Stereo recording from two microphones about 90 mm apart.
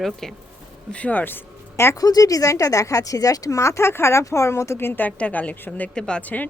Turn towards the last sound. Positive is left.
turn(degrees=15)  # may be behind; listen again after turning